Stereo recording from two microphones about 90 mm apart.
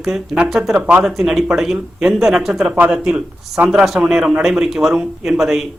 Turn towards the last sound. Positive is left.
turn(degrees=-5)  # may be behind; listen again after turning